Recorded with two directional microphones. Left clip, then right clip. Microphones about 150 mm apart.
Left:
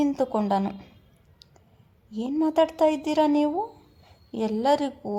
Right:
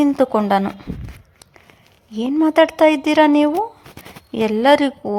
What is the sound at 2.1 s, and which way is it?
A woman's voice, 15° right (ahead or behind).